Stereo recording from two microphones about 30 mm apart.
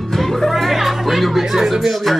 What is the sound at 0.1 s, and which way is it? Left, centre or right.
Music, centre.